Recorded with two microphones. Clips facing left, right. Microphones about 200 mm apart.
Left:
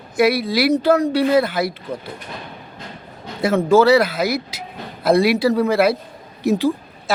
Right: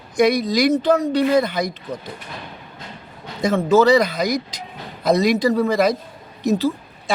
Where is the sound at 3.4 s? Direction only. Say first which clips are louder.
Left 1 dB; 10° left (ahead or behind).